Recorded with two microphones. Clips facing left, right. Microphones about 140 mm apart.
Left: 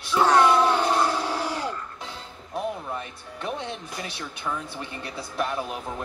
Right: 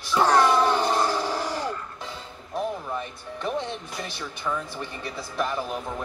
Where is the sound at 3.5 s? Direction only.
5° left (ahead or behind).